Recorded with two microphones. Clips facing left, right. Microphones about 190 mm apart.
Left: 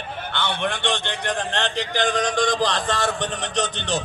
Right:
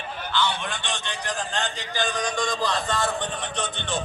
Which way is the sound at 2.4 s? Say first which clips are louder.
Left 4 dB; 90° left.